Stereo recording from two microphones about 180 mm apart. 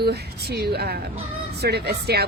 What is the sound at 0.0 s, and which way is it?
A woman's voice, 60° right (ahead or behind).